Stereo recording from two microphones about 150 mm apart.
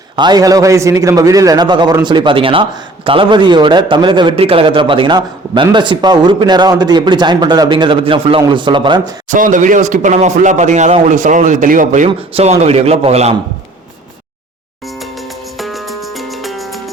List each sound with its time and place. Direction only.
0.2 s a man's voice: 25° right (ahead or behind)
9.3 s speech: 60° right (ahead or behind)
12.0 s a man's voice: 45° right (ahead or behind)
15.5 s music: centre (ahead or behind)